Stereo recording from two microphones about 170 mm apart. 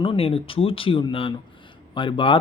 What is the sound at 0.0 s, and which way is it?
Speech, 35° left (ahead or behind).